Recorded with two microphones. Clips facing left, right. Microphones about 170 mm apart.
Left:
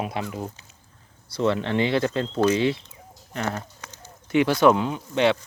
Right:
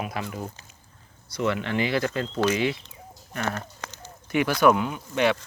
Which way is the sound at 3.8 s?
90° right.